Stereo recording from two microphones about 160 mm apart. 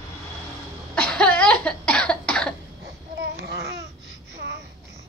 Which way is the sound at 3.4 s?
90° right.